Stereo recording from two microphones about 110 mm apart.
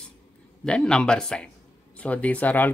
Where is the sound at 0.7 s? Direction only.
5° left (ahead or behind).